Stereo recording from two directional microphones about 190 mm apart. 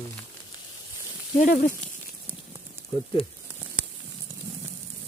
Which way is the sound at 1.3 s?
45° left (ahead or behind).